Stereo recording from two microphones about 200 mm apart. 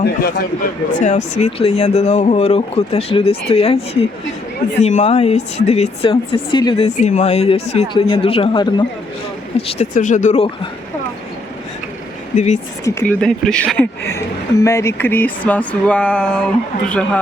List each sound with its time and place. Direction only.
0.0 s a man's voice: 50° left (ahead or behind)
0.9 s a man's voice: 40° left (ahead or behind)
13.1 s speech: 5° left (ahead or behind)